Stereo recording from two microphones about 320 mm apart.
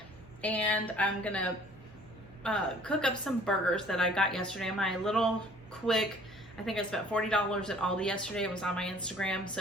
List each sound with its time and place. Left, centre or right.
0.4 s a woman's voice: centre